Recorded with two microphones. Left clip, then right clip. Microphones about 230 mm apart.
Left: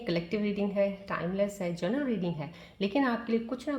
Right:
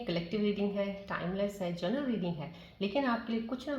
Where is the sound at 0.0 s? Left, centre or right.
Left.